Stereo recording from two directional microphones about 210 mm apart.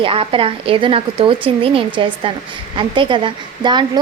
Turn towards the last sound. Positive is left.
turn(degrees=-20)  # may be behind; listen again after turning